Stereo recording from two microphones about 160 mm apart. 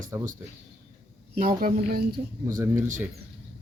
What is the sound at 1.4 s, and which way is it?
Speech, 60° right (ahead or behind).